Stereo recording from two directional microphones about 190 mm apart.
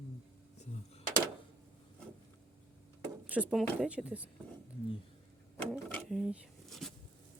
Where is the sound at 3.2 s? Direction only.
5° right (ahead or behind).